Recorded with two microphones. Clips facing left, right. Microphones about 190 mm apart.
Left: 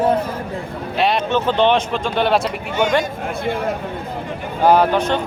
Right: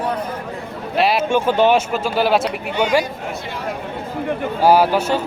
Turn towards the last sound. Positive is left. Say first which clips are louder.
# even
turn(degrees=-5)  # may be behind; listen again after turning